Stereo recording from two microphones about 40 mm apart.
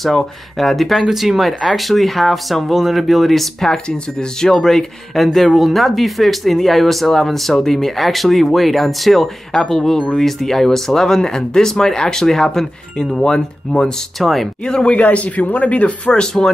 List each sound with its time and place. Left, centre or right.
0.6 s speech: centre
3.7 s speech: centre
9.5 s speech: centre
14.2 s speech: centre
14.9 s speech: left
16.1 s speech: centre